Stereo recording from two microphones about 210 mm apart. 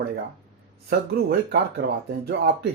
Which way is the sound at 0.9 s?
50° right (ahead or behind).